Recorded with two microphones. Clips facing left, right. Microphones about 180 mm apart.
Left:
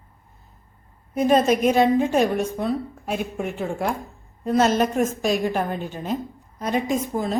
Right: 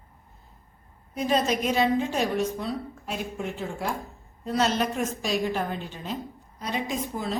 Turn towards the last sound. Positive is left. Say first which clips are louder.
# left 6 dB
turn(degrees=50)  # may be behind; listen again after turning